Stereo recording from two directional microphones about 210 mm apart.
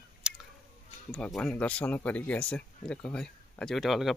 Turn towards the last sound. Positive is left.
turn(degrees=0)  # may be behind; listen again after turning